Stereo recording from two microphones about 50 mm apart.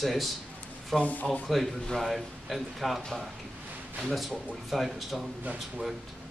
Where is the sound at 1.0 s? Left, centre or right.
Left.